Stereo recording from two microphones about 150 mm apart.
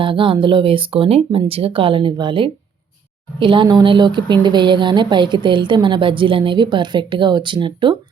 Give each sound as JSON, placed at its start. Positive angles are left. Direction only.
{"t": 0.0, "sound": "a woman's voice", "side_deg": -35}